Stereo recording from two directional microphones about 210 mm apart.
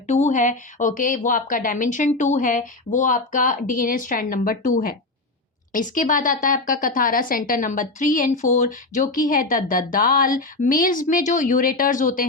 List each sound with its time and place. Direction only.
0.1 s a woman's voice: 35° left (ahead or behind)